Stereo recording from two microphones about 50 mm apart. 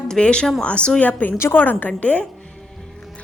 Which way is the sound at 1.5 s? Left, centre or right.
Left.